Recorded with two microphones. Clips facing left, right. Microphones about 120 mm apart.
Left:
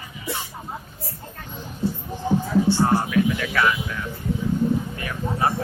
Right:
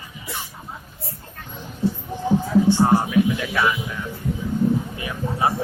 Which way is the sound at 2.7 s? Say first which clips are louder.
Right 2 dB; 20° right (ahead or behind).